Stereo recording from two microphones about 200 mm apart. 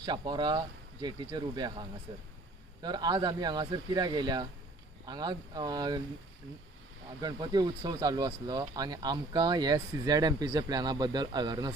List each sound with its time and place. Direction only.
0.0 s speech: 20° right (ahead or behind)
7.2 s speech: 20° right (ahead or behind)